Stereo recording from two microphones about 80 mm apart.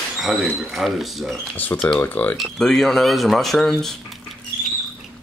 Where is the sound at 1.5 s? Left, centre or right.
Left.